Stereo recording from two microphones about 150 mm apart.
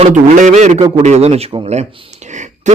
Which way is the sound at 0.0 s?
55° right (ahead or behind).